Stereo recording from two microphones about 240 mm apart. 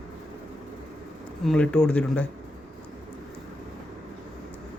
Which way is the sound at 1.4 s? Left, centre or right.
Centre.